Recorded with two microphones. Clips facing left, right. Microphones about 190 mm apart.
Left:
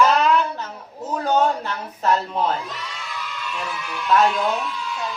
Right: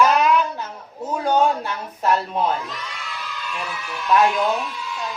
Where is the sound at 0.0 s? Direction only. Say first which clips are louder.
Even; 10° right (ahead or behind).